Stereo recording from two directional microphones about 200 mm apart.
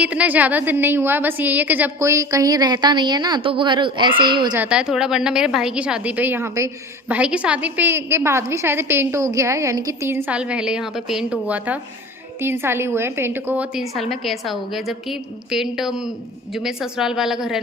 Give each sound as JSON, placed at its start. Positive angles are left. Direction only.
{"t": 0.0, "sound": "a woman's voice", "side_deg": -5}
{"t": 4.5, "sound": "a woman's voice", "side_deg": -5}